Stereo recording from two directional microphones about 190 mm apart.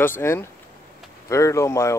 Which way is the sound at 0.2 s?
15° left (ahead or behind).